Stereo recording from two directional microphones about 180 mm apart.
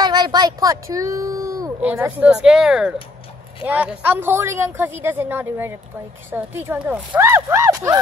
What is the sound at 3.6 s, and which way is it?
Speech, 10° right (ahead or behind).